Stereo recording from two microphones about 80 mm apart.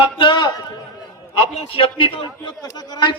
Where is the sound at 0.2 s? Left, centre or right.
Left.